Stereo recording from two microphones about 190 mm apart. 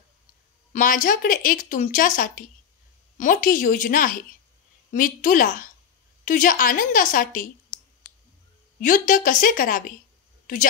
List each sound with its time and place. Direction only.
0.7 s speech: 45° left (ahead or behind)
8.8 s speech: 45° left (ahead or behind)